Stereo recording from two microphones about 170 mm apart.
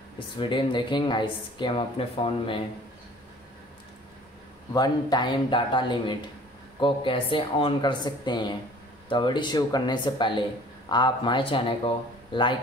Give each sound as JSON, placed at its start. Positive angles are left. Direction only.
{"t": 0.4, "sound": "speech", "side_deg": 30}
{"t": 4.7, "sound": "speech", "side_deg": 25}